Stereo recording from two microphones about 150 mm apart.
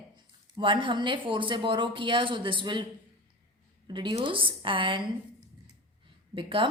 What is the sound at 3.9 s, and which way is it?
A woman's voice, 30° right (ahead or behind).